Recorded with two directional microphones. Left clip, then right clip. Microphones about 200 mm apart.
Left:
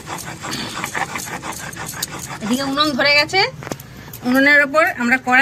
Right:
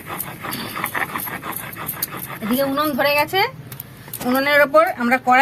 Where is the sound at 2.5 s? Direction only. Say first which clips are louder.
Left 1 dB; 10° right (ahead or behind).